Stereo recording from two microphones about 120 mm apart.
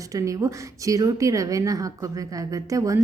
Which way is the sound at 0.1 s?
30° right (ahead or behind).